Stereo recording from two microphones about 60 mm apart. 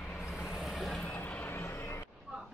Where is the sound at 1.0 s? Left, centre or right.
Left.